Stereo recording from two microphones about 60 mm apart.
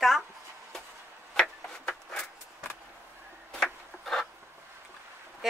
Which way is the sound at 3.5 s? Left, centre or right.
Centre.